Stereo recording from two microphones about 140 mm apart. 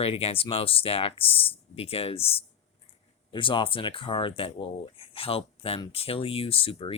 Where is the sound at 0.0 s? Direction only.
45° left (ahead or behind).